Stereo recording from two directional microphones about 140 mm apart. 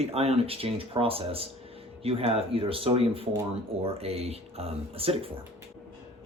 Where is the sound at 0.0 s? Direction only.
45° right (ahead or behind).